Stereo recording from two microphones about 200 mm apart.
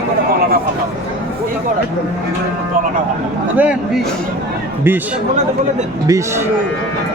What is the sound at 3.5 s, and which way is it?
Speech, 5° right (ahead or behind).